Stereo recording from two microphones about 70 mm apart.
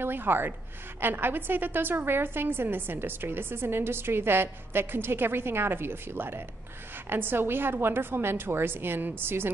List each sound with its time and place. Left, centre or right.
0.0 s a woman's voice: right